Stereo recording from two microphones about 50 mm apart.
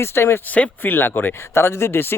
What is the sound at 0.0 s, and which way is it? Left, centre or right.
Speech, left.